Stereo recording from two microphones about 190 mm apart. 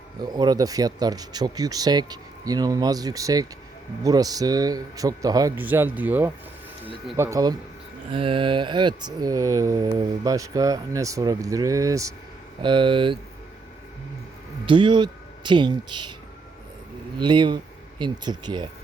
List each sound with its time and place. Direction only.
0.2 s speech: 20° right (ahead or behind)
8.1 s speech: 25° right (ahead or behind)
14.7 s speech: 25° right (ahead or behind)
17.2 s speech: 25° right (ahead or behind)